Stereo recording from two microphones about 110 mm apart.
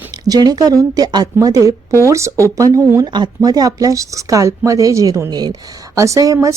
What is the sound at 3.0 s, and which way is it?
Speech, 40° right (ahead or behind).